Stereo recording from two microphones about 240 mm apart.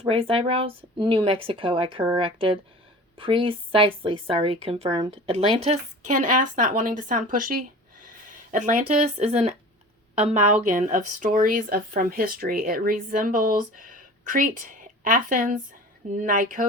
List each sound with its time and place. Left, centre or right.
0.0 s a woman's voice: right